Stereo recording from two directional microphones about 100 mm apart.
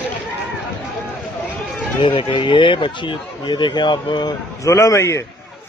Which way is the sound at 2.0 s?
60° left (ahead or behind).